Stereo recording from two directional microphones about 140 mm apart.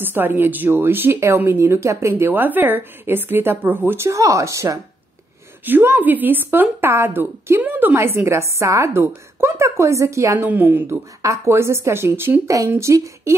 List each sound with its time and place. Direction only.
0.0 s speech: 15° right (ahead or behind)